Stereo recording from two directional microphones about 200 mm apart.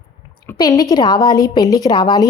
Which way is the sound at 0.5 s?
20° left (ahead or behind).